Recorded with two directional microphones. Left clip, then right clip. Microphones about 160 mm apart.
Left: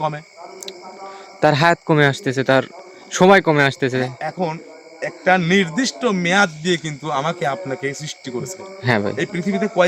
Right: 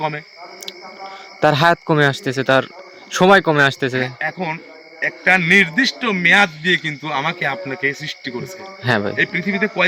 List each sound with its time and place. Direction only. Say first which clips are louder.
1.4 s a man's voice: right 1 dB; 10° left (ahead or behind)